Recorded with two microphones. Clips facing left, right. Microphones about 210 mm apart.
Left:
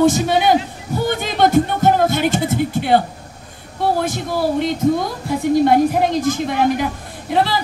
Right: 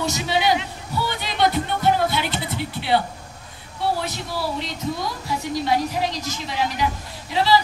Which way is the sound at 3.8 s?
50° left (ahead or behind).